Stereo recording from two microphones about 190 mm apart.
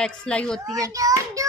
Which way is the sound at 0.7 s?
15° right (ahead or behind).